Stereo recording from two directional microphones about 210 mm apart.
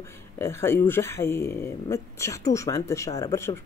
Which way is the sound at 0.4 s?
10° left (ahead or behind).